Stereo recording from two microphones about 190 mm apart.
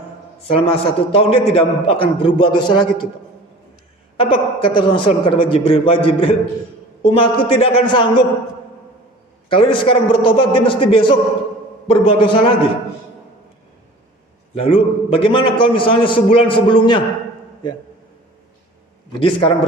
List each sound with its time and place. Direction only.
0.4 s a man's voice: 30° left (ahead or behind)
4.2 s a man's voice: 25° left (ahead or behind)
9.5 s a man's voice: 25° left (ahead or behind)
14.5 s a man's voice: 30° left (ahead or behind)
19.2 s a man's voice: 30° left (ahead or behind)